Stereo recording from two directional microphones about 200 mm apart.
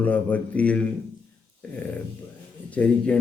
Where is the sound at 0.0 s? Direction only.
5° left (ahead or behind).